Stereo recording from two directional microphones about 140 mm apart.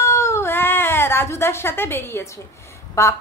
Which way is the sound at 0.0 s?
20° left (ahead or behind).